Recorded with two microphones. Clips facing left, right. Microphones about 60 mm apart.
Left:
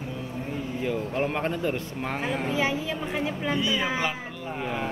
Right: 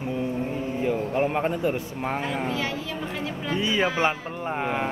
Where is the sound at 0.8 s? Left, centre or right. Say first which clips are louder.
Right 3 dB; centre.